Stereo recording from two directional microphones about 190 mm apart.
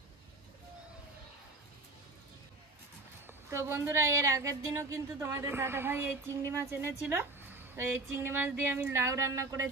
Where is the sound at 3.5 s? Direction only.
15° right (ahead or behind).